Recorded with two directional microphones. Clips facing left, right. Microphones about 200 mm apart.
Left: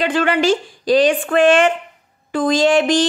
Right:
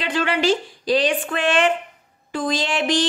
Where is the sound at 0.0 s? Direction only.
50° left (ahead or behind).